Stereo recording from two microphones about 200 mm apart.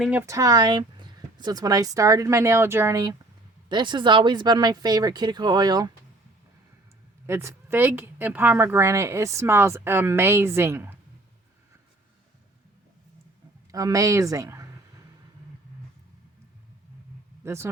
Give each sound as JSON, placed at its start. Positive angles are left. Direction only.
{"t": 0.0, "sound": "a woman's voice", "side_deg": -10}
{"t": 7.3, "sound": "a woman's voice", "side_deg": -15}
{"t": 13.7, "sound": "speech", "side_deg": -15}
{"t": 17.4, "sound": "speech", "side_deg": -15}